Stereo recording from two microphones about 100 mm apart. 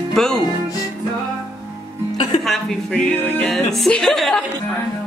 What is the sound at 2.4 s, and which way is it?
Speech, 5° left (ahead or behind).